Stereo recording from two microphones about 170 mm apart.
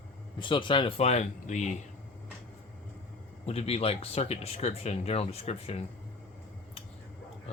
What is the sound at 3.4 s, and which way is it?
Speech, 35° left (ahead or behind).